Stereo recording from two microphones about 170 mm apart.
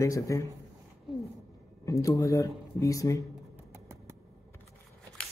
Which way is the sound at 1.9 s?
20° left (ahead or behind).